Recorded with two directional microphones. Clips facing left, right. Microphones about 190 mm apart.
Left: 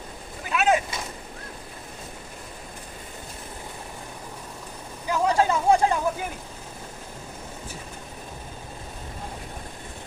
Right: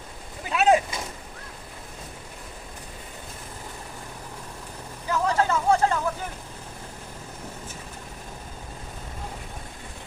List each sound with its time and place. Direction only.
0.5 s vehicle: 35° right (ahead or behind)
5.0 s vehicle: 15° left (ahead or behind)